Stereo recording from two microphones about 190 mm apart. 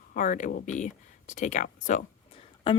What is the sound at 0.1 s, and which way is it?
Speech, 45° left (ahead or behind).